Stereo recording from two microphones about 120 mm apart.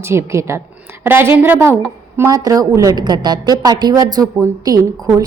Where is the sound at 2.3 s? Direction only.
30° right (ahead or behind).